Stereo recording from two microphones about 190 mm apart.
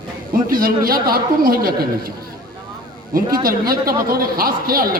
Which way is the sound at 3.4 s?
50° right (ahead or behind).